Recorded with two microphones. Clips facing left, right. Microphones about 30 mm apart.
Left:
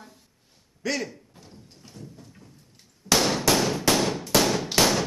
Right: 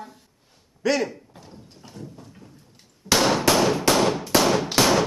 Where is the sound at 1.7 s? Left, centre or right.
Centre.